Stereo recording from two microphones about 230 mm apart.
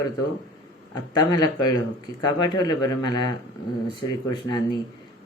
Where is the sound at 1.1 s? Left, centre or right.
Centre.